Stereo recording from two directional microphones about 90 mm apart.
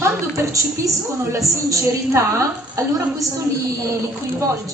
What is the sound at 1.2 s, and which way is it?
A woman's voice, 35° right (ahead or behind).